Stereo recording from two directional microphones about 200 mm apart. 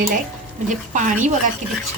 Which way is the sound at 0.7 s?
40° right (ahead or behind).